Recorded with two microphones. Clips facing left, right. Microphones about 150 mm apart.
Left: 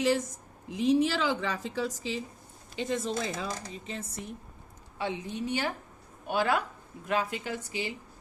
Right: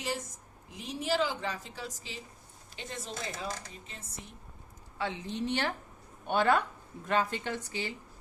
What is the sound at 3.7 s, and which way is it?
Speech, 90° left.